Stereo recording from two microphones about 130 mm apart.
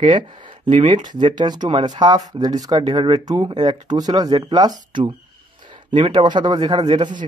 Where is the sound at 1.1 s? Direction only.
35° right (ahead or behind).